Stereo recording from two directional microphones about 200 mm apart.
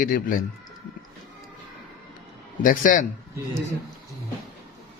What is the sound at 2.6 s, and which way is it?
Speech, 40° left (ahead or behind).